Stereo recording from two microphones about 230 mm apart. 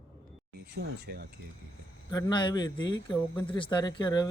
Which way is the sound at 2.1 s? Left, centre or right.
Centre.